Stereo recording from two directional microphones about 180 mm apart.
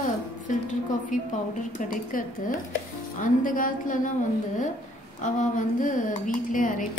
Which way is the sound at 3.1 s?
50° left (ahead or behind).